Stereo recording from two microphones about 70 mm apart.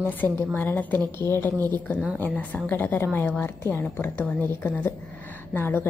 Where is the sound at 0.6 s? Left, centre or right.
Left.